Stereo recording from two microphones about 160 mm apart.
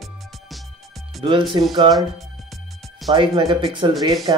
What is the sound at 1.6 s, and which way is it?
Speech, 35° right (ahead or behind).